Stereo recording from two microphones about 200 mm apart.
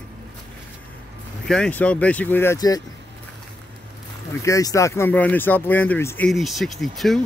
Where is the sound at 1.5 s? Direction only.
5° left (ahead or behind).